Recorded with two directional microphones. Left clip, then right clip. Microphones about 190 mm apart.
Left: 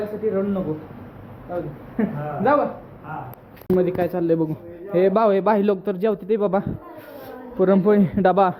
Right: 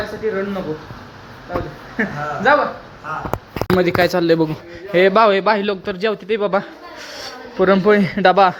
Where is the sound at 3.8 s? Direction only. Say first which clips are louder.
Right 7 dB; 20° right (ahead or behind); by 6.6 s centre (ahead or behind).